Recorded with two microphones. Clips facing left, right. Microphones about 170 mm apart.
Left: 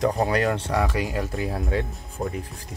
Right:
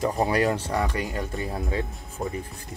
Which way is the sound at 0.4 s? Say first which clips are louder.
Even; 65° left (ahead or behind).